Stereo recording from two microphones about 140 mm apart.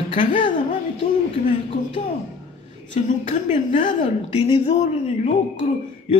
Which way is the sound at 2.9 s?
65° left (ahead or behind).